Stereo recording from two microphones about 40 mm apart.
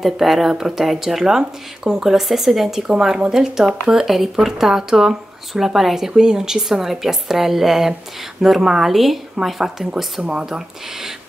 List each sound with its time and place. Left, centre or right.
0.0 s speech: centre
3.2 s speech: centre
4.1 s speech: centre
10.2 s speech: centre